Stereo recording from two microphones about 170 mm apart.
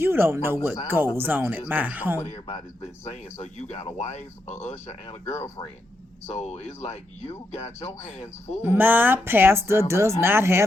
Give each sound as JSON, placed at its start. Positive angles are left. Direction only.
{"t": 0.0, "sound": "speech", "side_deg": -15}
{"t": 3.1, "sound": "speech", "side_deg": 40}
{"t": 5.2, "sound": "speech", "side_deg": 20}
{"t": 6.2, "sound": "speech", "side_deg": 35}
{"t": 8.6, "sound": "speech", "side_deg": -10}